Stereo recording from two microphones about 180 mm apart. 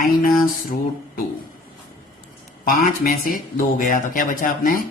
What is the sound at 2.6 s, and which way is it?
Speech, 50° left (ahead or behind).